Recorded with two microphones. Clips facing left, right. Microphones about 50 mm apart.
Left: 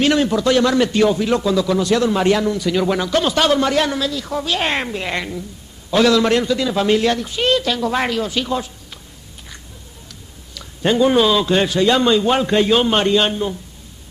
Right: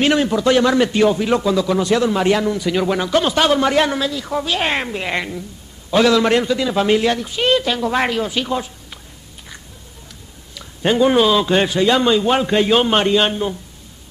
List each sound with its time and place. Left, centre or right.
0.0 s a man's voice: centre
2.0 s a man's voice: centre
10.5 s a man's voice: centre